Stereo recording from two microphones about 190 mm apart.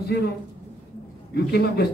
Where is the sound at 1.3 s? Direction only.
60° left (ahead or behind).